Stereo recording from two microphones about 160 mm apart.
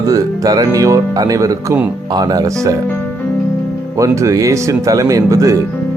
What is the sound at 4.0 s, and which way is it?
Speech, 20° right (ahead or behind).